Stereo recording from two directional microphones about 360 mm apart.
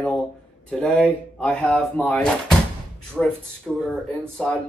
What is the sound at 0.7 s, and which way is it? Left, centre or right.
Speech, centre.